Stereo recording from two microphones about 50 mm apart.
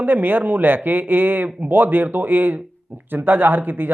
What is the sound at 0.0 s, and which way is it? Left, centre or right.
Speech, right.